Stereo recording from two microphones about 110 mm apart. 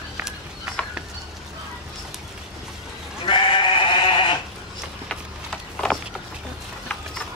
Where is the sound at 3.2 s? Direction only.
50° left (ahead or behind).